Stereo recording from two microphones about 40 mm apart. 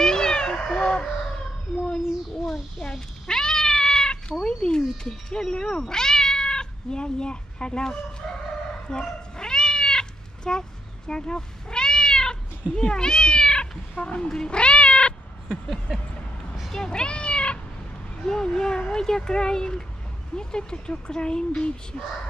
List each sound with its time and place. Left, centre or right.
0.0 s cat: centre
0.7 s music: left
2.8 s speech: centre
9.0 s cat: centre
11.1 s speech: centre
14.3 s cat: left
16.7 s cat: centre
18.2 s speech: centre